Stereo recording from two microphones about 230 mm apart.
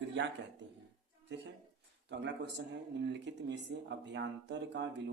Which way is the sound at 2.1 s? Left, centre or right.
Right.